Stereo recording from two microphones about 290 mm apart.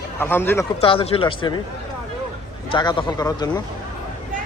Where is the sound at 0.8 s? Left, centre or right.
Centre.